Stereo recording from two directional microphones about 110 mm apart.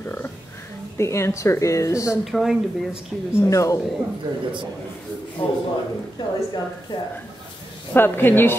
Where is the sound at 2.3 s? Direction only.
5° right (ahead or behind).